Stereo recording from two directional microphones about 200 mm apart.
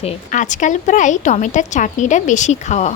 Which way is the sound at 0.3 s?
40° left (ahead or behind).